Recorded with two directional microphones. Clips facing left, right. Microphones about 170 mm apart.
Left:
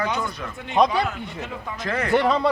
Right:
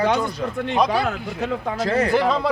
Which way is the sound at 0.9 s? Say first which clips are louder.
Right 3 dB; 70° right (ahead or behind).